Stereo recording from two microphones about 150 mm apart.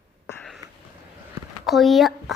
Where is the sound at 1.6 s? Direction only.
Centre (ahead or behind).